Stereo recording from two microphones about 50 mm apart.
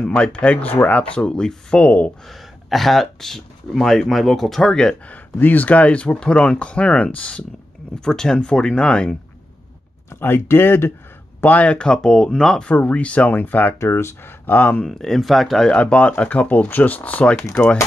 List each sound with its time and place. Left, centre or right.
0.2 s speech: left
1.9 s speech: left
2.2 s speech: centre
5.0 s speech: left
8.0 s speech: centre
10.2 s speech: left
11.4 s speech: left; by 12.6 s centre
12.6 s speech: left
13.7 s speech: left
14.9 s speech: centre
15.6 s speech: left